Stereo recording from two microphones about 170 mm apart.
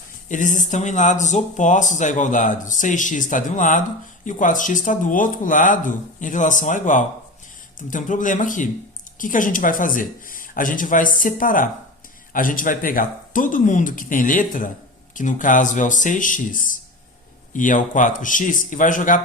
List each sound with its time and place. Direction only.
0.3 s speech: 50° left (ahead or behind)